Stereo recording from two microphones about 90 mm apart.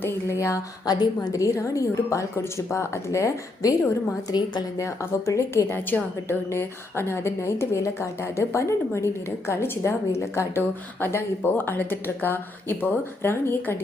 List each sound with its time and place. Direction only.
0.0 s a woman's voice: 30° left (ahead or behind)
4.3 s a woman's voice: 50° left (ahead or behind)
4.8 s a woman's voice: 35° left (ahead or behind)